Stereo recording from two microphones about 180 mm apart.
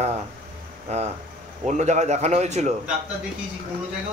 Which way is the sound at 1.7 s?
40° right (ahead or behind).